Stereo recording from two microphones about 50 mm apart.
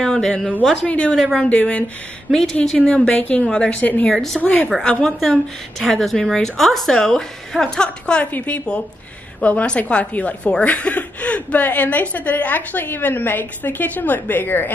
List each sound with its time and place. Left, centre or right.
0.0 s a woman's voice: centre
0.8 s a woman's voice: left
1.1 s a woman's voice: centre
1.4 s a woman's voice: left
2.6 s a woman's voice: centre
3.2 s a woman's voice: left
3.4 s a woman's voice: left
3.8 s a woman's voice: left
4.1 s a woman's voice: centre
4.4 s a woman's voice: left
5.0 s a woman's voice: centre
8.2 s a woman's voice: left